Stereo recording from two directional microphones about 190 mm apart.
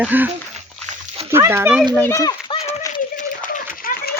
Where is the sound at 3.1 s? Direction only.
45° left (ahead or behind).